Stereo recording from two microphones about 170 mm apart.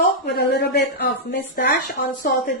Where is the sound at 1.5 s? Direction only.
55° left (ahead or behind).